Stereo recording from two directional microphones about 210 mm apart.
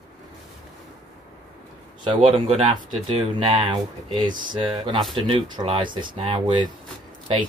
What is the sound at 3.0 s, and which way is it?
Speech, 25° right (ahead or behind).